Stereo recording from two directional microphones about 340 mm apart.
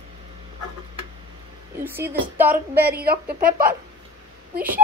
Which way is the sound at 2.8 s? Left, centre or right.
Right.